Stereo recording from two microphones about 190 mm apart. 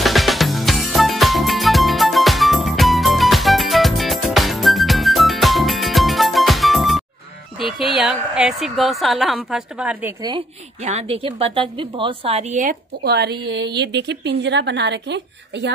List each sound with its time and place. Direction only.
0.0 s music: centre (ahead or behind)
7.5 s a woman's voice: centre (ahead or behind)
10.2 s a woman's voice: 25° right (ahead or behind)
13.0 s a woman's voice: 60° right (ahead or behind)